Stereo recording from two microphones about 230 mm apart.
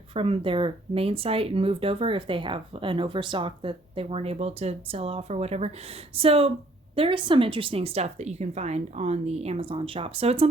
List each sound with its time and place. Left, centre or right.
0.1 s speech: right